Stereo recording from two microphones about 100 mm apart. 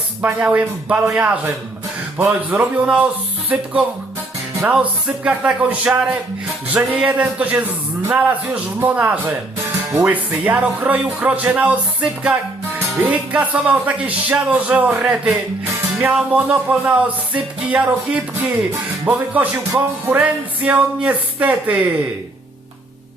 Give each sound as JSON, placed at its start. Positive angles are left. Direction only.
{"t": 0.2, "sound": "speech", "side_deg": -15}
{"t": 2.5, "sound": "speech", "side_deg": -15}